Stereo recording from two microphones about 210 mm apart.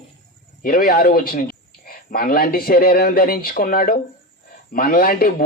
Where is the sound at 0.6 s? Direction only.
45° left (ahead or behind).